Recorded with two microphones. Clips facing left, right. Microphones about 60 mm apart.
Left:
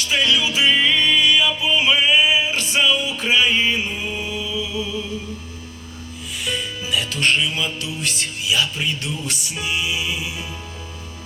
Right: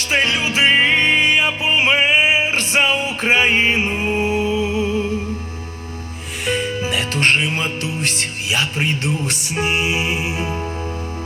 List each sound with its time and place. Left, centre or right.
0.0 s music: right
6.4 s music: right